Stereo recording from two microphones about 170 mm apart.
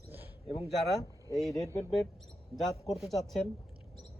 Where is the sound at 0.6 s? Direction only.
Centre (ahead or behind).